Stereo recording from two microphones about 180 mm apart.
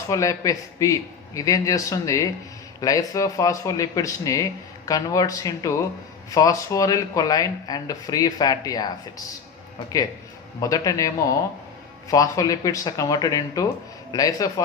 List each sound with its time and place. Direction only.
0.1 s speech: 20° left (ahead or behind)
10.6 s speech: 20° left (ahead or behind)